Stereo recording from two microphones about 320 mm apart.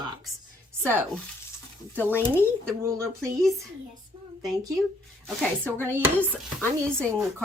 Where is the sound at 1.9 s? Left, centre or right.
Centre.